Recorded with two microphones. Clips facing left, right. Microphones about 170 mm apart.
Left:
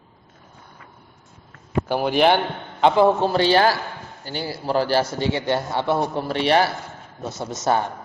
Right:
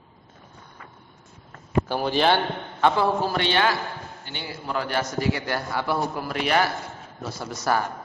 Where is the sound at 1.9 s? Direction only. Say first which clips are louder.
Left 5 dB; 15° left (ahead or behind).